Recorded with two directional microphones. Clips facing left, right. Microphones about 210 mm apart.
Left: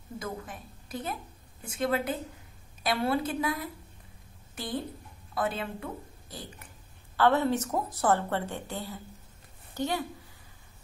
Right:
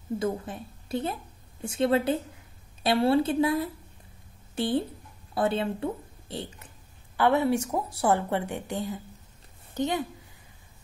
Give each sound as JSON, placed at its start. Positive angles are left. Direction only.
{"t": 0.2, "sound": "a woman's voice", "side_deg": -30}
{"t": 7.2, "sound": "a woman's voice", "side_deg": -15}